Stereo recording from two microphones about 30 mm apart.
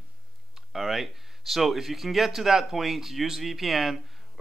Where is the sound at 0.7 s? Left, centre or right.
Centre.